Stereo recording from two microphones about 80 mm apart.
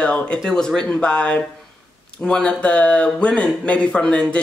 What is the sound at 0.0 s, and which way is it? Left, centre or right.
Speech, centre.